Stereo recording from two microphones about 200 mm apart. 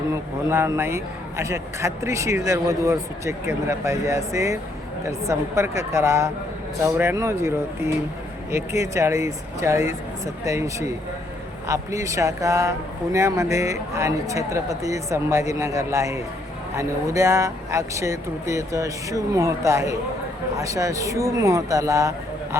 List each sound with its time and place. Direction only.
0.5 s speech: 10° right (ahead or behind)